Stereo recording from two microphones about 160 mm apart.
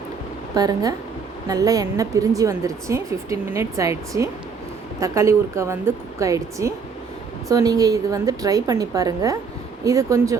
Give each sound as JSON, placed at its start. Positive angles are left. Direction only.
{"t": 0.5, "sound": "a woman's voice", "side_deg": -25}